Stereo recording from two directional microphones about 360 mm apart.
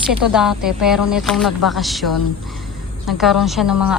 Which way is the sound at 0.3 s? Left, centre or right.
Centre.